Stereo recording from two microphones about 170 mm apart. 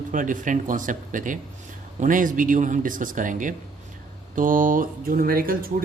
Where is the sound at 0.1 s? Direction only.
50° right (ahead or behind).